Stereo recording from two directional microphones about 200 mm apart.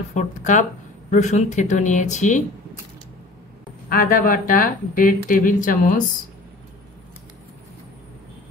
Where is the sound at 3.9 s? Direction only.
45° left (ahead or behind).